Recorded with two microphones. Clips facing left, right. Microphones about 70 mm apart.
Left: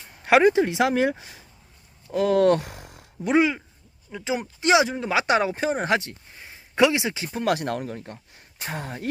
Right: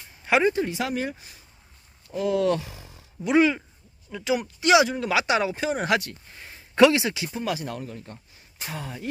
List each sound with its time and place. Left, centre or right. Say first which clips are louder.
0.3 s speech: left 4 dB; left
2.1 s speech: left 4 dB; left
3.3 s speech: right 1 dB; centre
4.1 s speech: right 2 dB; left
5.2 s speech: left 2 dB; left
6.3 s a sound: right 1 dB; centre
7.3 s speech: left 5 dB; left